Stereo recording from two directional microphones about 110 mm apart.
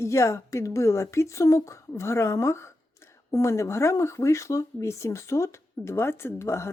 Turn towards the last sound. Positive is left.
turn(degrees=25)  # may be behind; listen again after turning